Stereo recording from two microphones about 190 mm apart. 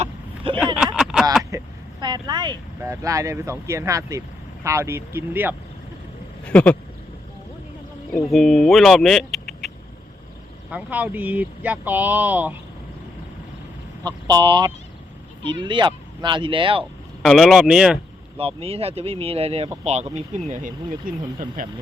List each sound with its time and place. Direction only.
0.0 s vehicle: 25° right (ahead or behind)
0.9 s a sound: centre (ahead or behind)
1.5 s speech: 20° right (ahead or behind)
6.4 s speech: 5° left (ahead or behind)
8.1 s speech: centre (ahead or behind)
14.0 s speech: 20° right (ahead or behind)
17.2 s speech: centre (ahead or behind)
18.3 s speech: 30° right (ahead or behind)